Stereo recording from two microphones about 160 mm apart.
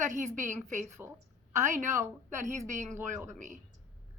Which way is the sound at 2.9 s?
15° right (ahead or behind).